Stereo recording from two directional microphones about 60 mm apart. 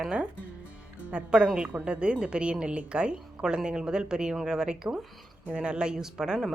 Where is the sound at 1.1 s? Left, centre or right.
Centre.